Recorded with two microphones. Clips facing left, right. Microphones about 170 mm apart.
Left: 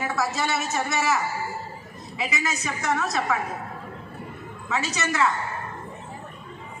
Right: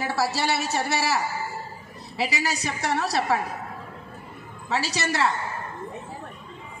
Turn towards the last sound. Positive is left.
turn(degrees=-35)  # may be behind; listen again after turning